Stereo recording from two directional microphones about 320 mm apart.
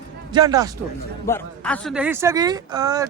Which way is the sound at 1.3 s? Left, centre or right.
Centre.